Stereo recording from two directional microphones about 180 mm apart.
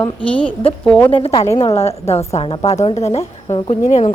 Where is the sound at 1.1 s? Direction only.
30° left (ahead or behind).